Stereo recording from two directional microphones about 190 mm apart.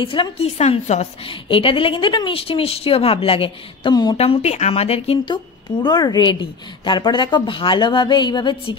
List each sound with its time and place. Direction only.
0.0 s a woman's voice: 25° left (ahead or behind)